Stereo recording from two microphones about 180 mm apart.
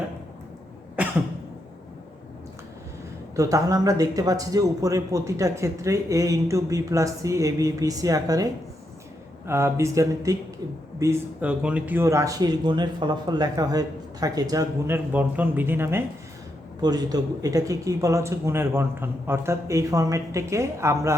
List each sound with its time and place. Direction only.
3.3 s a man's voice: 20° right (ahead or behind)
9.5 s a man's voice: 15° right (ahead or behind)